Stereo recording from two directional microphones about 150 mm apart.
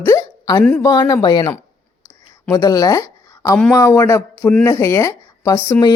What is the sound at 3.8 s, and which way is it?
Speech, 20° left (ahead or behind).